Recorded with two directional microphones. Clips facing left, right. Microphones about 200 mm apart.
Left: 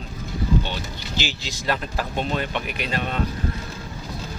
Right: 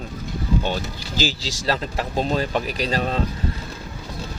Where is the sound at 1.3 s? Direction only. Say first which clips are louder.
Right 2 dB; 30° right (ahead or behind).